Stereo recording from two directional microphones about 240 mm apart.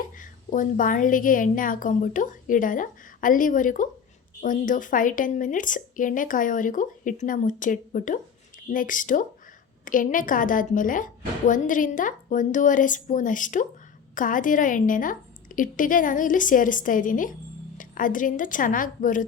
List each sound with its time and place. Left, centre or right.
0.2 s speech: left